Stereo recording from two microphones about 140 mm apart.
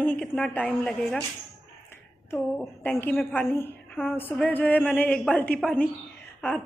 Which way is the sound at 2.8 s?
15° left (ahead or behind).